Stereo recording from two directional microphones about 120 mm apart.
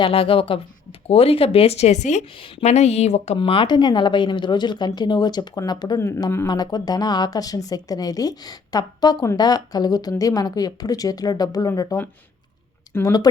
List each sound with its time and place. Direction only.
0.0 s a woman's voice: 50° left (ahead or behind)
3.3 s a woman's voice: 45° left (ahead or behind); by 13.2 s 25° left (ahead or behind)